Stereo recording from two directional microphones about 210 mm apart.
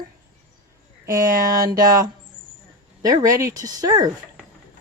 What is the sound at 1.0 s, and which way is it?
Speech, 15° right (ahead or behind).